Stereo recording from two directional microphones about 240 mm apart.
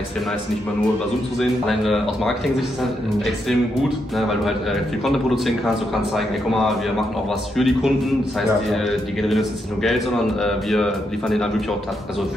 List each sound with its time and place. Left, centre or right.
1.4 s a man's voice: centre
4.2 s a man's voice: centre